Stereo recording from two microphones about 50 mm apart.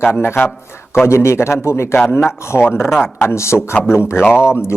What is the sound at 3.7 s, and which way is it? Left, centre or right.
Speech, left.